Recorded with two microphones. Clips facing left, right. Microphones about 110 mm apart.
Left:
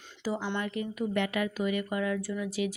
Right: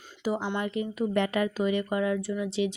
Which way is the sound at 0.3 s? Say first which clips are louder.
Right 3 dB; 20° right (ahead or behind).